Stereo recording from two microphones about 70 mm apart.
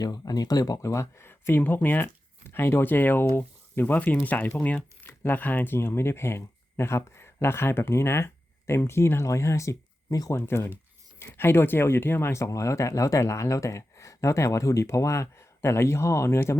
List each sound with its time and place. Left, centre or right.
0.0 s speech: left
10.3 s speech: left
12.3 s speech: left